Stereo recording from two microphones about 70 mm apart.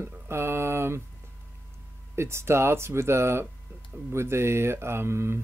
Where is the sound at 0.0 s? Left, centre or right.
Right.